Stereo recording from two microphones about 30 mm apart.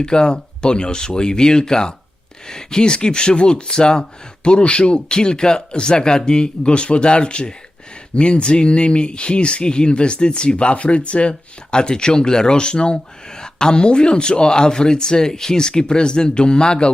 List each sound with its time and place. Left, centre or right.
0.0 s speech: left
11.7 s speech: left
15.3 s speech: centre
15.5 s speech: left